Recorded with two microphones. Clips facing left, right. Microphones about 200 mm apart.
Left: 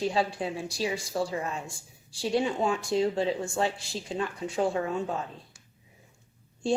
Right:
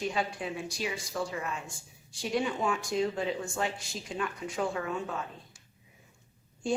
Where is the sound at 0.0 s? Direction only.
30° left (ahead or behind).